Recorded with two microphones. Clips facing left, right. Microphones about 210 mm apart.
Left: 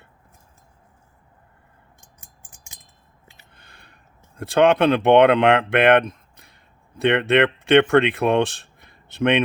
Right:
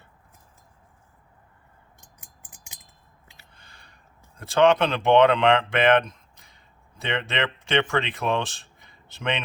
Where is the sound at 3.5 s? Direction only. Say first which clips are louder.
Left 3 dB; 60° left (ahead or behind).